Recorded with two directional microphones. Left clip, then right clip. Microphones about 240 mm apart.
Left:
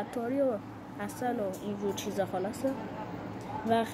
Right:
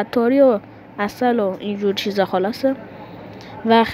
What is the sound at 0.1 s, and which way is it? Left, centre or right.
Speech, right.